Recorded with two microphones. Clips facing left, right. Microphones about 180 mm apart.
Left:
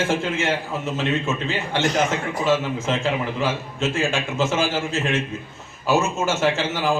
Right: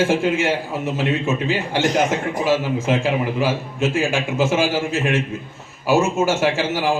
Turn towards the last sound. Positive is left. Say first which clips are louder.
# right 2 dB
turn(degrees=-10)  # may be behind; listen again after turning